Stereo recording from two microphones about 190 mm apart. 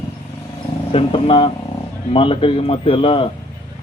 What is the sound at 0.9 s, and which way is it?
Speech, 30° left (ahead or behind).